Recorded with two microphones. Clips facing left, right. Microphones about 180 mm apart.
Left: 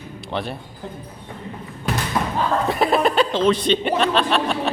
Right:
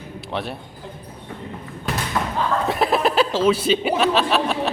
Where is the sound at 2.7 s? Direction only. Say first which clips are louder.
Left 1 dB; centre (ahead or behind).